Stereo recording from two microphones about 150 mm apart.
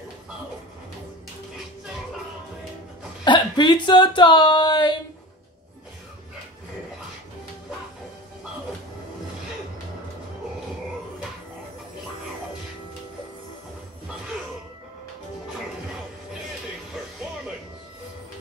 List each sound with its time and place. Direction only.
3.3 s speech: 30° left (ahead or behind)